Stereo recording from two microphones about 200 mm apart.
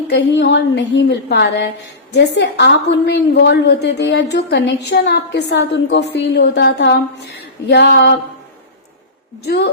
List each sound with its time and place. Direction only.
0.1 s a woman's voice: 60° left (ahead or behind)
9.4 s a woman's voice: 55° left (ahead or behind)